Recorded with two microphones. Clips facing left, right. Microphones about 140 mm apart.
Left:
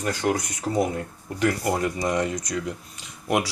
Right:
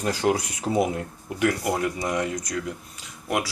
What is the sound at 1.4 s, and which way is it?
Speech, 10° right (ahead or behind).